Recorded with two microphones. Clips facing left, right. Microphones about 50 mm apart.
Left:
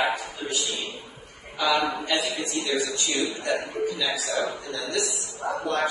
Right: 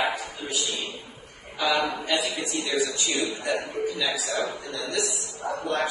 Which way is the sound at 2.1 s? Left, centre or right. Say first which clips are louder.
Even; centre.